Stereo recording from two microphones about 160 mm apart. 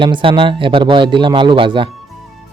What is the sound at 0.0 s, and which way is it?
Speech, 30° right (ahead or behind).